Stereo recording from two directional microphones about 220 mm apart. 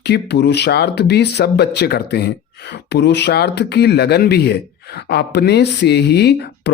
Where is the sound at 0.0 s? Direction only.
50° left (ahead or behind).